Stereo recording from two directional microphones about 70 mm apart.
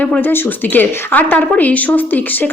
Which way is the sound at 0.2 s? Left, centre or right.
Left.